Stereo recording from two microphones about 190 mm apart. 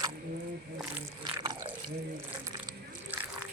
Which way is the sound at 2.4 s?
15° right (ahead or behind).